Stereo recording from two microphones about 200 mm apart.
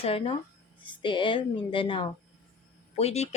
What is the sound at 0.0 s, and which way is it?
Speech, 30° left (ahead or behind).